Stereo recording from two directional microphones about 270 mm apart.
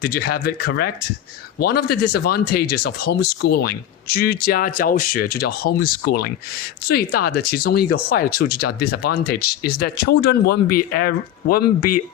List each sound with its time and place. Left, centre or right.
0.2 s speech: left
11.9 s speech: left